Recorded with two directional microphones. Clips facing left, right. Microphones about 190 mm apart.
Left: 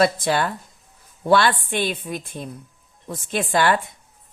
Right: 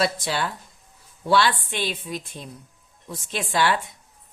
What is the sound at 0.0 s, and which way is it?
A woman's voice, 55° left (ahead or behind).